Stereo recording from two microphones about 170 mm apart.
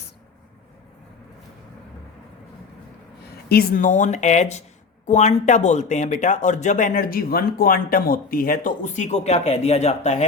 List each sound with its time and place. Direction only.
3.5 s speech: 60° left (ahead or behind); by 10.2 s 40° left (ahead or behind)